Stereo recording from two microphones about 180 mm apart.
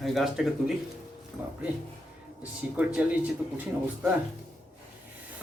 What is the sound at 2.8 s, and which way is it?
Speech, 5° right (ahead or behind).